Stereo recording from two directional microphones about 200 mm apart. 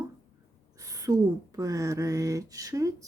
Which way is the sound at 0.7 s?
15° right (ahead or behind).